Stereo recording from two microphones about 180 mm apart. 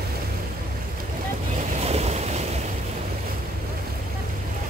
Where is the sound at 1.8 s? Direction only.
35° right (ahead or behind).